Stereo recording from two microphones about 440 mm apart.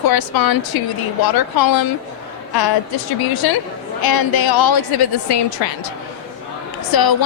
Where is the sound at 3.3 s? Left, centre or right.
Left.